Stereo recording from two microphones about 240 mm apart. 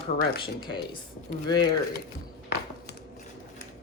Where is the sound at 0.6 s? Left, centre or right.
Centre.